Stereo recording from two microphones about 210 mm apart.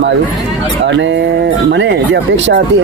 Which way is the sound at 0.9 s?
60° right (ahead or behind).